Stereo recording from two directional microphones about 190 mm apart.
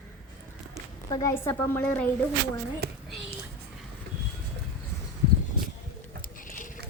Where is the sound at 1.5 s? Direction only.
10° left (ahead or behind).